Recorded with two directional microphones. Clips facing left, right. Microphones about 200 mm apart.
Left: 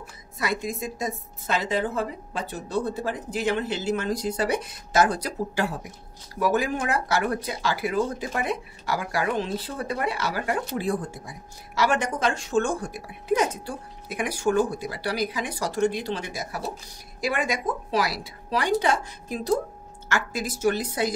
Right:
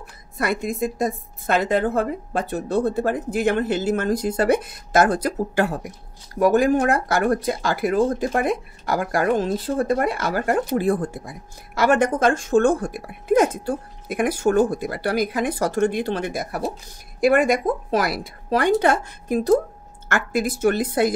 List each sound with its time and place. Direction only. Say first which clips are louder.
0.4 s a woman's voice: right 6 dB; 55° right (ahead or behind)